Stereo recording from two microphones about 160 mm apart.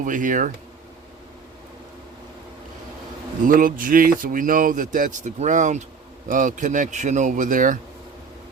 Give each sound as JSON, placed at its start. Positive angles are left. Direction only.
{"t": 0.0, "sound": "speech", "side_deg": -55}
{"t": 3.4, "sound": "speech", "side_deg": -60}